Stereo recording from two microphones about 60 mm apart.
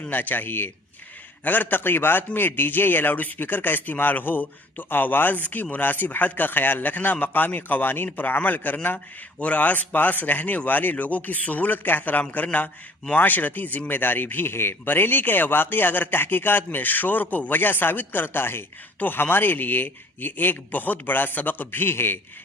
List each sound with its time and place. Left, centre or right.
0.0 s a man's voice: left